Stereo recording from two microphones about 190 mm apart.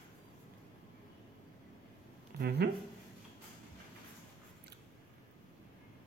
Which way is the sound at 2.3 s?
60° right (ahead or behind).